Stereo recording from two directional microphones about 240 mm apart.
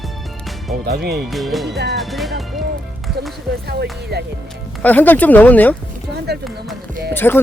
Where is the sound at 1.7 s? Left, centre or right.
Right.